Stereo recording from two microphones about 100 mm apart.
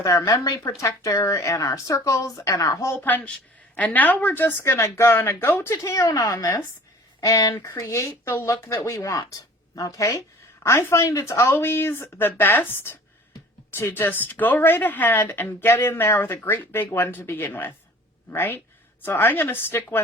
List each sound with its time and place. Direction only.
0.3 s speech: 35° left (ahead or behind); by 4.5 s 20° left (ahead or behind)
4.6 s a woman's voice: 30° left (ahead or behind)